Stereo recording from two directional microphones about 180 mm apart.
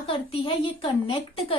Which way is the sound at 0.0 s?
30° left (ahead or behind).